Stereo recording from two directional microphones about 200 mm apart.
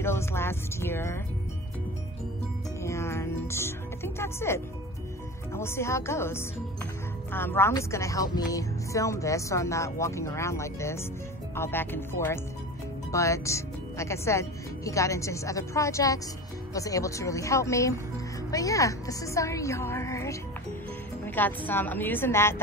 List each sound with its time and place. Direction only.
0.0 s speech: 10° left (ahead or behind)
2.8 s music: 15° left (ahead or behind)
5.5 s speech: 10° left (ahead or behind)
21.4 s speech: 10° left (ahead or behind)